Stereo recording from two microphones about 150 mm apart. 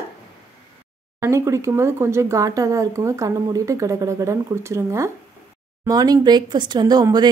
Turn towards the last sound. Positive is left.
turn(degrees=-25)  # may be behind; listen again after turning